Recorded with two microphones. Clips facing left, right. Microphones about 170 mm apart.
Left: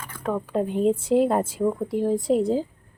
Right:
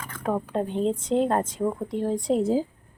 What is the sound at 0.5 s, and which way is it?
A woman's voice, 5° left (ahead or behind).